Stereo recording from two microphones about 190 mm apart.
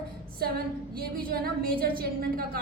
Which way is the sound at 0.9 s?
50° right (ahead or behind).